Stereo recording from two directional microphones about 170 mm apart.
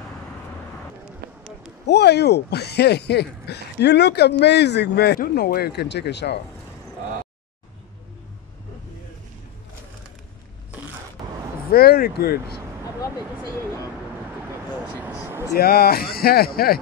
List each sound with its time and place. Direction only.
1.9 s speech: 80° left
11.7 s speech: 65° left (ahead or behind)
15.0 s a sound: 15° right (ahead or behind)
15.5 s speech: 65° left (ahead or behind)